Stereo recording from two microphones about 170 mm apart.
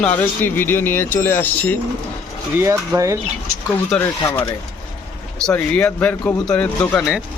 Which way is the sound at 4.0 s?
15° left (ahead or behind).